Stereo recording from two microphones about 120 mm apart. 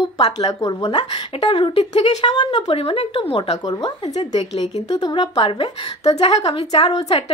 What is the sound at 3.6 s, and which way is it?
Speech, 35° left (ahead or behind).